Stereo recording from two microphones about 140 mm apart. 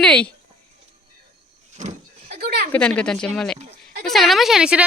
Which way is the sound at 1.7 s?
75° right (ahead or behind).